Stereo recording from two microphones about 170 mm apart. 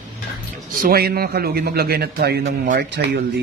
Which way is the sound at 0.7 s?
60° right (ahead or behind).